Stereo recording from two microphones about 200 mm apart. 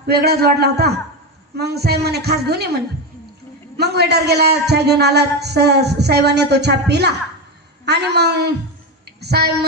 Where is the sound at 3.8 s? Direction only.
55° right (ahead or behind).